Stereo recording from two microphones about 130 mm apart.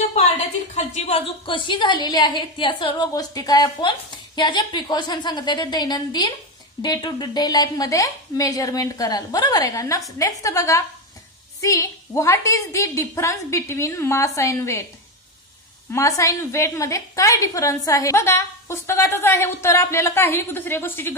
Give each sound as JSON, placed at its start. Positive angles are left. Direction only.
{"t": 0.1, "sound": "a woman's voice", "side_deg": 60}
{"t": 3.1, "sound": "a woman's voice", "side_deg": 30}
{"t": 15.9, "sound": "a woman's voice", "side_deg": 20}